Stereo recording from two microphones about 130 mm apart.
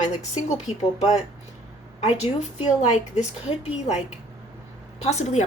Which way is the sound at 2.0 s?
55° left (ahead or behind).